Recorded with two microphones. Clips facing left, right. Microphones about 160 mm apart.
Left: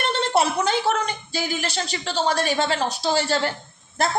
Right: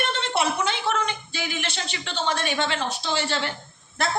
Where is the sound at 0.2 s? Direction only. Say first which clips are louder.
Left 7 dB; 40° left (ahead or behind).